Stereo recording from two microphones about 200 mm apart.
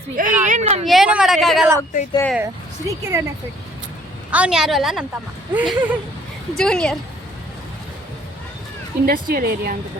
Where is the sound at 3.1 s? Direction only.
15° right (ahead or behind).